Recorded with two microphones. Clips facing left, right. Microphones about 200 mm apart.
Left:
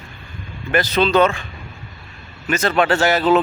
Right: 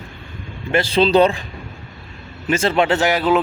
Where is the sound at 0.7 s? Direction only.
30° right (ahead or behind).